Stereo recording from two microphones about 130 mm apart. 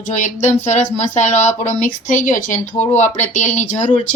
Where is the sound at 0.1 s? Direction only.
65° left (ahead or behind).